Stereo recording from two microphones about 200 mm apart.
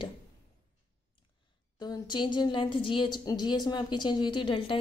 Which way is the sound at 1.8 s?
20° left (ahead or behind).